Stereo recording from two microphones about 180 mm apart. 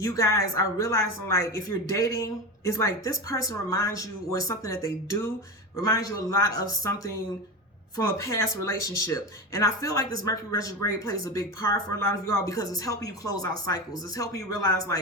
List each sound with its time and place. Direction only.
0.0 s speech: 20° left (ahead or behind)